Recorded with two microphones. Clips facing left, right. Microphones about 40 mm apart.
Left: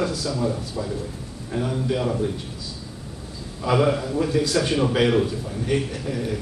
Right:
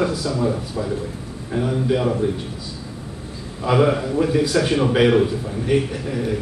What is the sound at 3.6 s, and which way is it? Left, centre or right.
A man's voice, centre.